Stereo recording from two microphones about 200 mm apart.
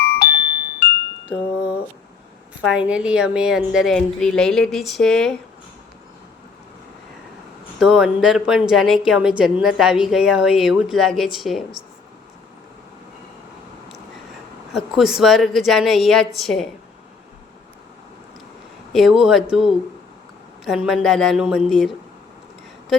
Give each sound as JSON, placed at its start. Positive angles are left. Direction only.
{"t": 0.0, "sound": "music", "side_deg": 55}
{"t": 2.6, "sound": "a woman's voice", "side_deg": -5}
{"t": 7.8, "sound": "a woman's voice", "side_deg": 0}
{"t": 14.7, "sound": "a woman's voice", "side_deg": 0}
{"t": 18.9, "sound": "a woman's voice", "side_deg": 0}